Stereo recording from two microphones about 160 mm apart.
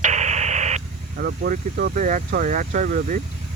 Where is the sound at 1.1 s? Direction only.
70° right (ahead or behind); by 3.2 s 55° right (ahead or behind).